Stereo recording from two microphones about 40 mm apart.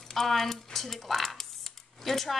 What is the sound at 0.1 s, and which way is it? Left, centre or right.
A woman's voice, centre.